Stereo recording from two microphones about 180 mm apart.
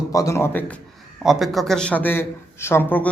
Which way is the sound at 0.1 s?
20° left (ahead or behind).